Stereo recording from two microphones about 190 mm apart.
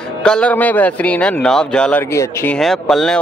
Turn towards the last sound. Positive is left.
turn(degrees=0)  # may be behind; listen again after turning